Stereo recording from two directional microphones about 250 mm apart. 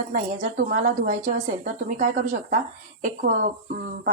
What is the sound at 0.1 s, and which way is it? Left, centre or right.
A woman's voice, right.